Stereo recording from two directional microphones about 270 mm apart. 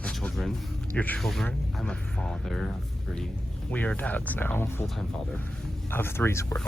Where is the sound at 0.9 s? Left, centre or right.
Centre.